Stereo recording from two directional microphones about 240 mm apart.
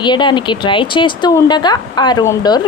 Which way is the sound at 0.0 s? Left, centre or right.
Centre.